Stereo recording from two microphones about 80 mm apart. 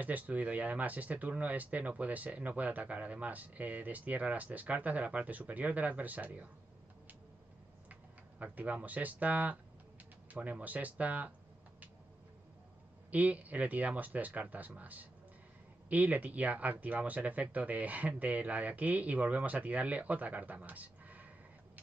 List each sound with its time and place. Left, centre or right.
0.0 s speech: centre
7.9 s speech: centre
13.1 s speech: centre